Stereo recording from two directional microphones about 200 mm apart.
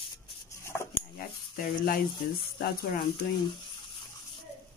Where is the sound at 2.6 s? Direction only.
50° left (ahead or behind).